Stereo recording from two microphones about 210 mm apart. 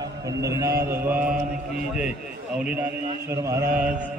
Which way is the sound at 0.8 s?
10° right (ahead or behind).